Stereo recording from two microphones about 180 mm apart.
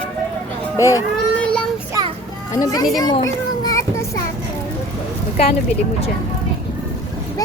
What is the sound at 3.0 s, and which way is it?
Children playing, 20° left (ahead or behind).